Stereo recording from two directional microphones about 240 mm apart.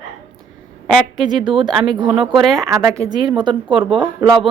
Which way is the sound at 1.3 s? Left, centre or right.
Centre.